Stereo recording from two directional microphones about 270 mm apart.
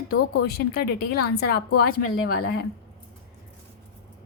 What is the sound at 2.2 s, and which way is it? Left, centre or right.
Speech, left.